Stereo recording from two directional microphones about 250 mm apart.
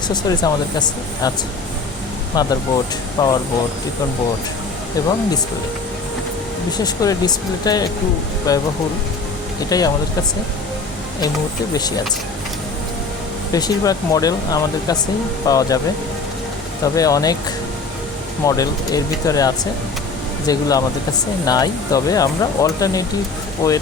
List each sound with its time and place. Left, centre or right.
0.1 s speech: centre
2.3 s speech: centre
5.0 s speech: centre
6.7 s speech: centre
11.7 s speech: centre
13.5 s speech: centre
16.8 s speech: centre
18.4 s speech: centre